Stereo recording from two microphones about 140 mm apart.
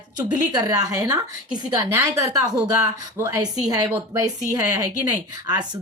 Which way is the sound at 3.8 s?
30° right (ahead or behind).